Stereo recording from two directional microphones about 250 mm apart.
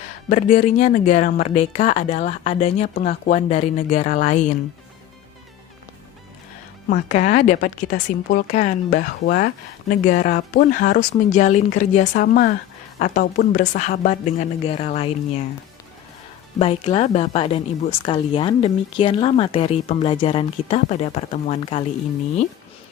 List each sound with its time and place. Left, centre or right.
0.3 s speech: left
6.9 s speech: left
16.6 s speech: left